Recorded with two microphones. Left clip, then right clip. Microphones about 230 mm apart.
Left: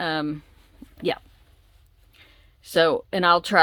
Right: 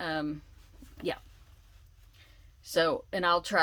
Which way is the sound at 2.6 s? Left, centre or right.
Left.